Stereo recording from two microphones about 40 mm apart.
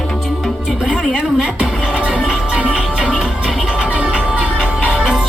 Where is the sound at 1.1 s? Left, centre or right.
Right.